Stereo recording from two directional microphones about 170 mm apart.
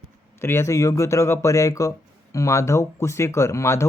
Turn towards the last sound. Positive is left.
turn(degrees=15)  # may be behind; listen again after turning